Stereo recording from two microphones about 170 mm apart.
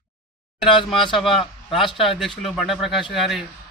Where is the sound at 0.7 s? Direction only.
30° left (ahead or behind).